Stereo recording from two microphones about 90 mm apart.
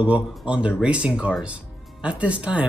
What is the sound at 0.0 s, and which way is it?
Speech, 15° right (ahead or behind).